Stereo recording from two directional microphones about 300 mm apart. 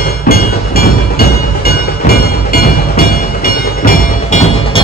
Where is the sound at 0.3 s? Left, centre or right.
Left.